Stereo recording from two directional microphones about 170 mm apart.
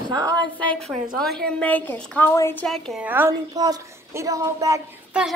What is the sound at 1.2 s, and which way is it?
A woman's voice, 5° left (ahead or behind).